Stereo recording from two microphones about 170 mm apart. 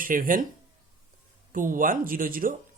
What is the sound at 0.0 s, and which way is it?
Speech, 55° right (ahead or behind).